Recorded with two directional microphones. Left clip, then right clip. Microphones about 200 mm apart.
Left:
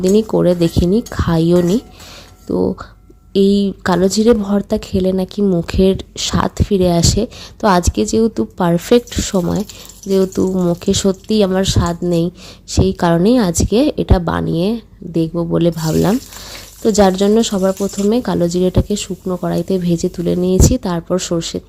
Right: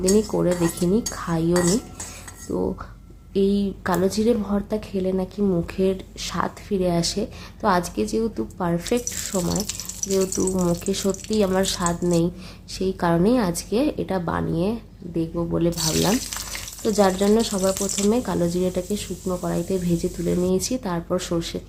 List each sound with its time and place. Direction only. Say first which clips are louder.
0.0 s speech: left 7 dB; 35° left (ahead or behind)